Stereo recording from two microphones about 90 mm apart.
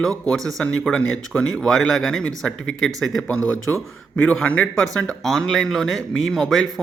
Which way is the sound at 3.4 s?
40° right (ahead or behind).